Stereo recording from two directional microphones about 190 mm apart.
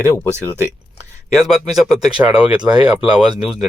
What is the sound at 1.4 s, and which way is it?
Speech, centre (ahead or behind).